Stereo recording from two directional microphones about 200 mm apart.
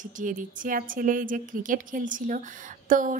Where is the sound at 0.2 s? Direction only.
40° right (ahead or behind).